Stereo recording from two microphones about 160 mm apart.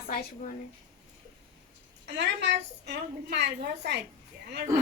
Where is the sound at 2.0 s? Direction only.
90° right.